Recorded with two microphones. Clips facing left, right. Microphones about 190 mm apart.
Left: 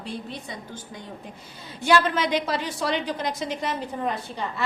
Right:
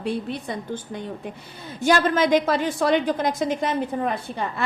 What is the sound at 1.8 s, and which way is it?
A woman's voice, 45° right (ahead or behind).